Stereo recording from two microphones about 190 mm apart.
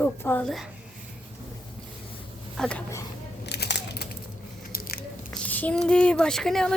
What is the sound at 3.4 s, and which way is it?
Crumpling, 60° left (ahead or behind).